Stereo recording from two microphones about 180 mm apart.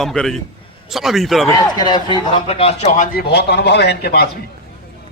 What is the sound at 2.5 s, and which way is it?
Speech, 35° left (ahead or behind).